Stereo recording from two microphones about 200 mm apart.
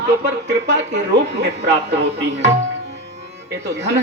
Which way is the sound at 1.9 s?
60° right (ahead or behind).